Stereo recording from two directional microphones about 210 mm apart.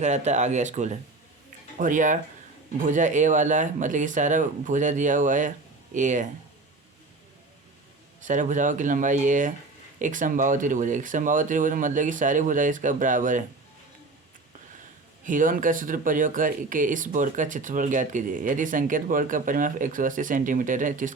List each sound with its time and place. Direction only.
0.0 s speech: 35° right (ahead or behind)
8.2 s speech: 35° right (ahead or behind)
15.2 s speech: 40° right (ahead or behind)